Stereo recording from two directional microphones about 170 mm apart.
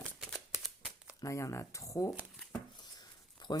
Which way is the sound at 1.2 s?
15° left (ahead or behind).